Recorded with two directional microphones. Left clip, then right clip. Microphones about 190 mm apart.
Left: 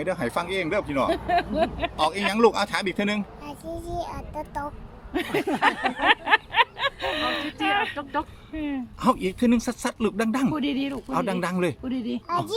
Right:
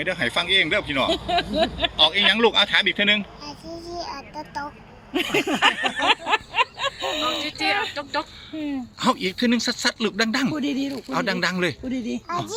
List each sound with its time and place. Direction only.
0.0 s speech: 10° left (ahead or behind)
1.3 s a sound: 15° right (ahead or behind)
2.0 s a child's voice: 10° left (ahead or behind)
5.1 s a sound: 25° right (ahead or behind)
7.4 s speech: 10° left (ahead or behind)
10.5 s speech: 25° right (ahead or behind)
11.1 s speech: 5° left (ahead or behind)
11.9 s speech: 25° right (ahead or behind)